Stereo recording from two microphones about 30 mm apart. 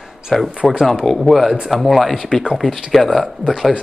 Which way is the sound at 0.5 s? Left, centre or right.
Right.